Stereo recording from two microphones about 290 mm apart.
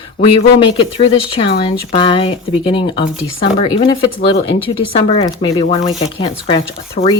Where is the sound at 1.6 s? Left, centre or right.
Centre.